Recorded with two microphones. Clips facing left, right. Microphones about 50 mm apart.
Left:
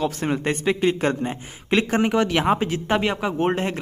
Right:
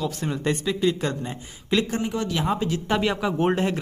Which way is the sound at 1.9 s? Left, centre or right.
Left.